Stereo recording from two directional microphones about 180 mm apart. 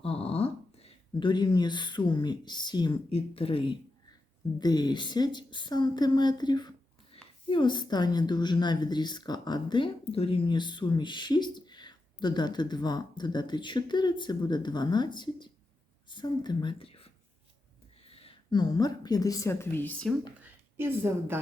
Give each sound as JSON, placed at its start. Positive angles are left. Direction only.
{"t": 0.0, "sound": "a woman's voice", "side_deg": 35}
{"t": 18.1, "sound": "speech", "side_deg": 30}
{"t": 20.4, "sound": "a sound", "side_deg": -10}